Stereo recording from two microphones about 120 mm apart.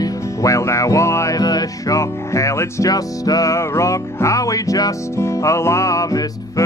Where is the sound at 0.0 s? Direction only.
25° left (ahead or behind).